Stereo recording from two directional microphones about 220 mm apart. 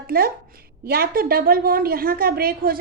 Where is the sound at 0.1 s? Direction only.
45° right (ahead or behind).